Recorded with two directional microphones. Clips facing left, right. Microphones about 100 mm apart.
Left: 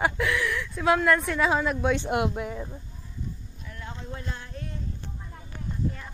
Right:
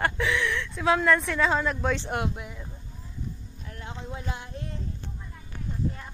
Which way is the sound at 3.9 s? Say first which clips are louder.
Right 2 dB; 15° right (ahead or behind).